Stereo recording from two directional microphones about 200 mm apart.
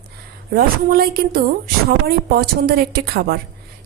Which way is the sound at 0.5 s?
45° right (ahead or behind).